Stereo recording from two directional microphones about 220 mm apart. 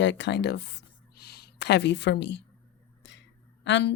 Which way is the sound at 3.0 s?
55° left (ahead or behind).